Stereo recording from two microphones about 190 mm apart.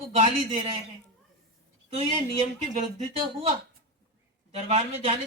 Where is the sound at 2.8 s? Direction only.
40° right (ahead or behind).